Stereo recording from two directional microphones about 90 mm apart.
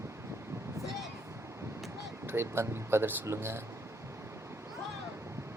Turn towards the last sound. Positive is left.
turn(degrees=-30)  # may be behind; listen again after turning